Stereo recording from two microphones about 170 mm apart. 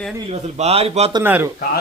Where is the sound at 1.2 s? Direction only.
10° right (ahead or behind).